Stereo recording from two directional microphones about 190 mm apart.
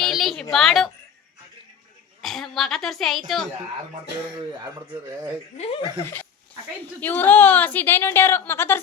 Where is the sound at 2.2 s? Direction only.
Centre (ahead or behind).